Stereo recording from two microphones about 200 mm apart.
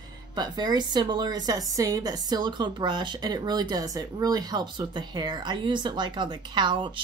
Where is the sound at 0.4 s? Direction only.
20° right (ahead or behind).